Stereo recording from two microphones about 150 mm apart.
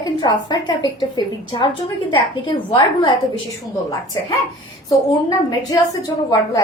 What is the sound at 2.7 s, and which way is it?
Speech, 30° left (ahead or behind).